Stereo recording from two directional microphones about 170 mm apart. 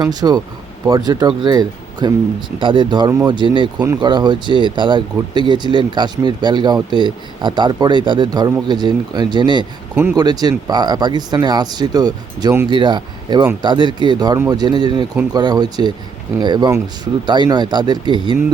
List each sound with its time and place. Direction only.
0.0 s speech: 25° right (ahead or behind)
9.9 s speech: 10° right (ahead or behind)
10.2 s speech: 25° right (ahead or behind)